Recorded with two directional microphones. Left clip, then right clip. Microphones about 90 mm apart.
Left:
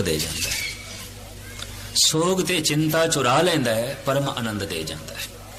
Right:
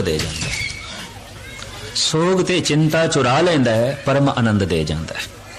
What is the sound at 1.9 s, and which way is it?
A man's voice, 30° left (ahead or behind).